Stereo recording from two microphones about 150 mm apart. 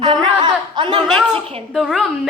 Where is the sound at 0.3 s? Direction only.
35° right (ahead or behind).